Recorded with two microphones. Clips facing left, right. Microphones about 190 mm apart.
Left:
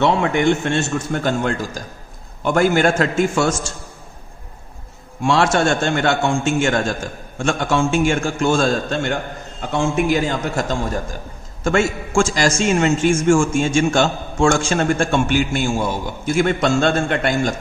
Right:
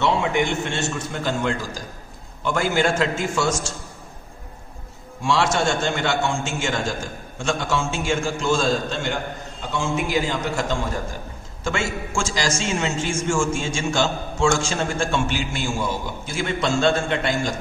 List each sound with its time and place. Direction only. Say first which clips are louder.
0.0 s a man's voice: left 5 dB; 55° left (ahead or behind)
5.2 s a man's voice: left 4 dB; 55° left (ahead or behind)